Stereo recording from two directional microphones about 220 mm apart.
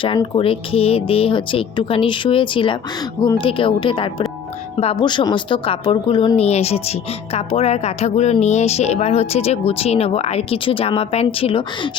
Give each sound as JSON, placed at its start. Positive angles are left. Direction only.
{"t": 0.0, "sound": "speech", "side_deg": 25}